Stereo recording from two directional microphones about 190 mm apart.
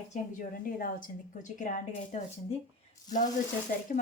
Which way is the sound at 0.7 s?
45° left (ahead or behind).